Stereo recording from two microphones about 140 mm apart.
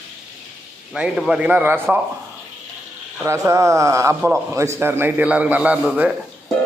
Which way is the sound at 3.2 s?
20° right (ahead or behind).